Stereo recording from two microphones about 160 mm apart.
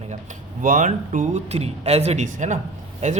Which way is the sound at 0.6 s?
55° right (ahead or behind).